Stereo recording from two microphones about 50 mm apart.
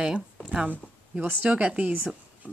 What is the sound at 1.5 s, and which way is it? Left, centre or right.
Speech, right.